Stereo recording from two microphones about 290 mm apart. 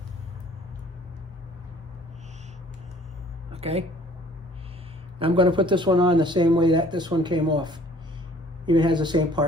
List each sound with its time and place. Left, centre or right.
3.5 s speech: right
5.2 s speech: centre